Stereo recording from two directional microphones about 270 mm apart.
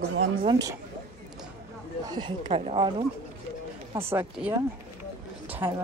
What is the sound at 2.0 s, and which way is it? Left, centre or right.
Speech, centre.